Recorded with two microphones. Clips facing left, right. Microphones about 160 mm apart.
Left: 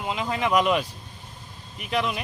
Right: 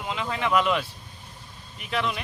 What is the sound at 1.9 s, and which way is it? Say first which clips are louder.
Speech: left 2 dB; 10° left (ahead or behind).